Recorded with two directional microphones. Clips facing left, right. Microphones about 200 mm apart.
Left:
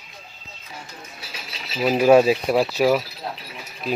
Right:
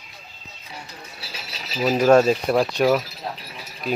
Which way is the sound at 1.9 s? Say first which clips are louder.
Left 1 dB; 10° left (ahead or behind).